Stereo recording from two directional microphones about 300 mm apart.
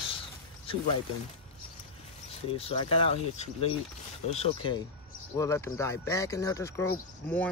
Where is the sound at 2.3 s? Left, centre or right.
Centre.